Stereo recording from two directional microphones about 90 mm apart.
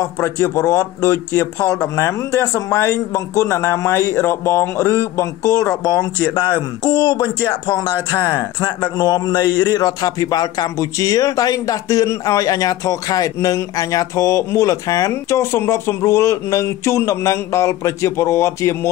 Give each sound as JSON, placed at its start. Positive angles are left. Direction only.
{"t": 0.2, "sound": "speech", "side_deg": 35}
{"t": 5.9, "sound": "speech", "side_deg": 55}